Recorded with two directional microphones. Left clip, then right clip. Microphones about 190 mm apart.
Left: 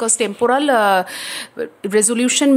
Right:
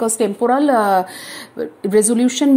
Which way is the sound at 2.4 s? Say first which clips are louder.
Even; 30° left (ahead or behind).